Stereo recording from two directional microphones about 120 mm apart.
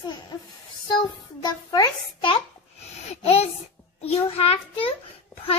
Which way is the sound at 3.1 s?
60° left (ahead or behind).